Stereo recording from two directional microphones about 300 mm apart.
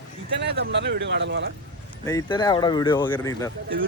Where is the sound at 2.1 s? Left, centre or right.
Centre.